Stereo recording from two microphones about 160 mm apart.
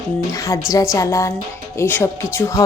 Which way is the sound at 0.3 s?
20° left (ahead or behind).